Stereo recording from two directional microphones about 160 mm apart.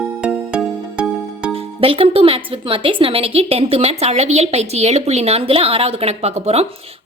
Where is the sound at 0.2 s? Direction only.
5° right (ahead or behind).